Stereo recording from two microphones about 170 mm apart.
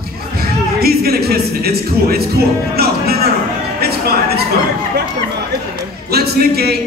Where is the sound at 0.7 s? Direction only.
65° right (ahead or behind).